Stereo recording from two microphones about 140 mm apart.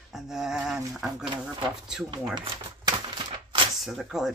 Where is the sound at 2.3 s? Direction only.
35° right (ahead or behind).